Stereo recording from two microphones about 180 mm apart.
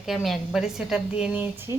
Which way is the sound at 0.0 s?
Centre (ahead or behind).